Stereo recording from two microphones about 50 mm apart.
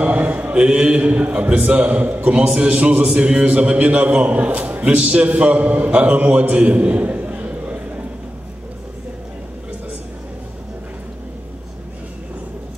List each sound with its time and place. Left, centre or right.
0.0 s a man's voice: right